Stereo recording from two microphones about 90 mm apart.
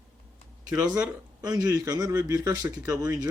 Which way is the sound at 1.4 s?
45° right (ahead or behind).